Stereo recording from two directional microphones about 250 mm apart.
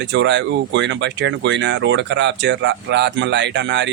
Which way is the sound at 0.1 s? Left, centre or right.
Right.